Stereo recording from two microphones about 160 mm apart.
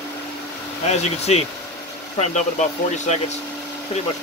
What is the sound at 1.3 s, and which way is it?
Speech, 45° left (ahead or behind).